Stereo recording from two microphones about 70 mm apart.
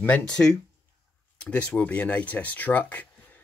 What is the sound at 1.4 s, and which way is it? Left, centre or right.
Speech, centre.